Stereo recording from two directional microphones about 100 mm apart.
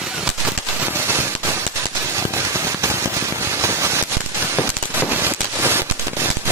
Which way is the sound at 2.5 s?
25° right (ahead or behind).